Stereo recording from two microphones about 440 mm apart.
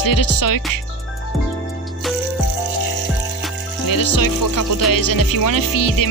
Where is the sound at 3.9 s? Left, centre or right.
Left.